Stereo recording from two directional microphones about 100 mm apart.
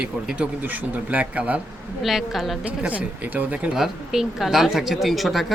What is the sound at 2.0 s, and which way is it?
Speech, 5° right (ahead or behind).